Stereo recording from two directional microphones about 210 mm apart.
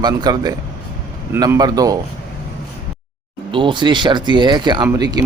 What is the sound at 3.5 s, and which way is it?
Speech, 25° right (ahead or behind).